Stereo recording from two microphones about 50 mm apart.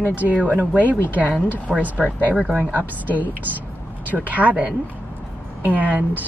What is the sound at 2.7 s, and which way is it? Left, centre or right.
Speech, right.